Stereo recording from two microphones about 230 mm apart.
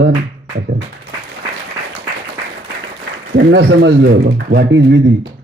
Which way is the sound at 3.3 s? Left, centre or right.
Right.